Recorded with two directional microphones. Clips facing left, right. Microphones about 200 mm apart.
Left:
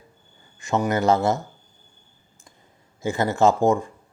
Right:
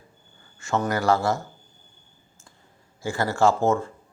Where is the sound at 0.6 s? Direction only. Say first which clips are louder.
Left 3 dB; 20° left (ahead or behind).